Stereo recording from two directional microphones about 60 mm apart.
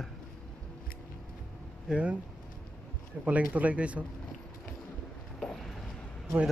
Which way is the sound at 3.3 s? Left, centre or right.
Right.